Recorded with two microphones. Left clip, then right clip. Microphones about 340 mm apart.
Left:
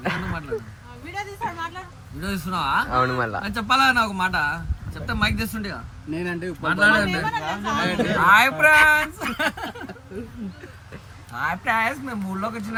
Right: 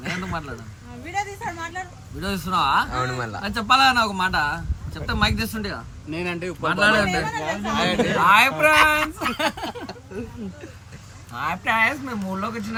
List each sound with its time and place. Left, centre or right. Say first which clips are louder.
0.0 s a sound: left 2 dB; centre
1.1 s a woman's voice: right 2 dB; centre
2.2 s a man's voice: right 4 dB; centre
7.3 s a woman's voice: left 1 dB; centre
8.1 s a man's voice: left 1 dB; centre
11.3 s a man's voice: right 1 dB; centre